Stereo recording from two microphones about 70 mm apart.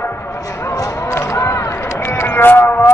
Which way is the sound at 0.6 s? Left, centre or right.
Left.